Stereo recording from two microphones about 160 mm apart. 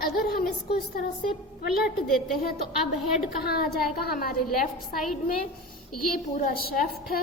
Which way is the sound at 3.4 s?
75° left (ahead or behind).